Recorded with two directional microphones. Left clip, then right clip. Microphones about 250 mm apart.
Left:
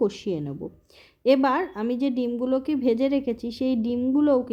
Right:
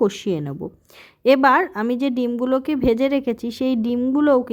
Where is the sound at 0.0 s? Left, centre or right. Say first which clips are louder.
Right 5 dB; right.